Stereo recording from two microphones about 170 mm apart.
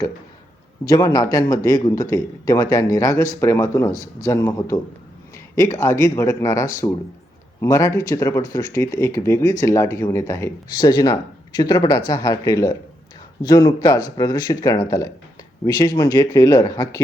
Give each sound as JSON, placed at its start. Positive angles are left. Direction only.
{"t": 0.9, "sound": "speech", "side_deg": 20}